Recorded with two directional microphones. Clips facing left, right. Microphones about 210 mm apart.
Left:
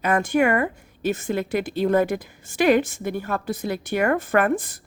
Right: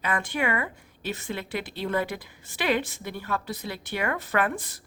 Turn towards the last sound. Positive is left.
turn(degrees=50)  # may be behind; listen again after turning